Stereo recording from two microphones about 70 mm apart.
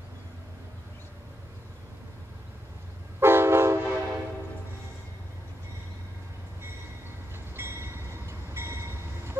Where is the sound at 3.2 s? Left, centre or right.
Right.